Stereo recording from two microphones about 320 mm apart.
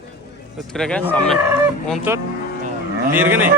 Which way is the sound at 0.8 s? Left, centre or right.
Centre.